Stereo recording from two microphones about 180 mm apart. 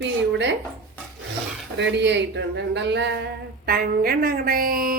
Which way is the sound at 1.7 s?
75° right (ahead or behind).